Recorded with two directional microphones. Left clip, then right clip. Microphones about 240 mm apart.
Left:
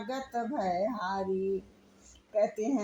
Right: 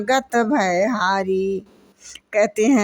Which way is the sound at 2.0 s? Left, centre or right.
Right.